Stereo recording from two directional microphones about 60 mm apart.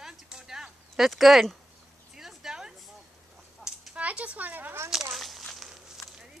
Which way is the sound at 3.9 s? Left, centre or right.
Right.